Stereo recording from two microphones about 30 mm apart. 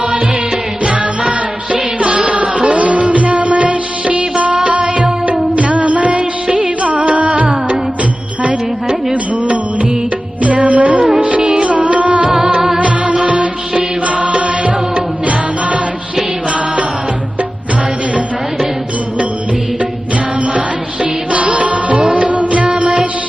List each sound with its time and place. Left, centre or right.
1.7 s music: right
4.5 s music: right
10.7 s music: right
12.5 s music: centre
13.2 s music: right
21.3 s music: right